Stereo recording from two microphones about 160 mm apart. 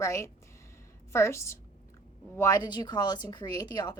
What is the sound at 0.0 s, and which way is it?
A woman's voice, 20° left (ahead or behind).